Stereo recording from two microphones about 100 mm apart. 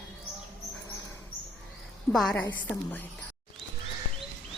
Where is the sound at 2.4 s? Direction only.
15° left (ahead or behind).